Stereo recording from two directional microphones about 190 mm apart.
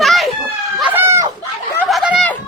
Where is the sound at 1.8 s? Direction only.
5° right (ahead or behind).